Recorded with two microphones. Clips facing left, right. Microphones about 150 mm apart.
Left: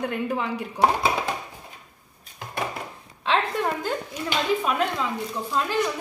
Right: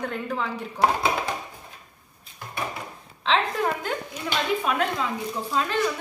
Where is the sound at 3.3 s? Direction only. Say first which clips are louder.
Even; 5° left (ahead or behind).